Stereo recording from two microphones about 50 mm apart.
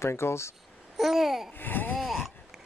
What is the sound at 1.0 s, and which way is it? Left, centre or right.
Babbling, centre.